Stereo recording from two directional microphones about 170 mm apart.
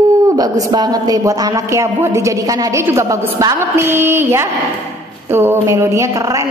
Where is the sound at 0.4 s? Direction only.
20° right (ahead or behind).